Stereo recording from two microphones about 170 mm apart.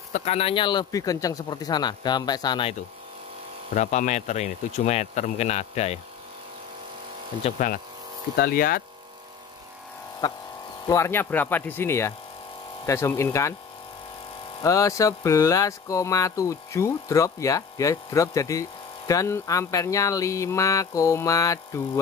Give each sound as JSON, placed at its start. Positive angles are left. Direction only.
{"t": 0.1, "sound": "music", "side_deg": 40}
{"t": 3.7, "sound": "speech", "side_deg": 45}
{"t": 7.5, "sound": "speech", "side_deg": 50}
{"t": 10.2, "sound": "music", "side_deg": 25}
{"t": 10.9, "sound": "speech", "side_deg": 15}
{"t": 14.6, "sound": "music", "side_deg": 20}